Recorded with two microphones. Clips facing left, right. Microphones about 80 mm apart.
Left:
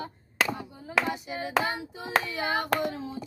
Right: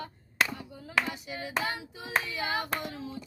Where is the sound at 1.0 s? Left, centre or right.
Left.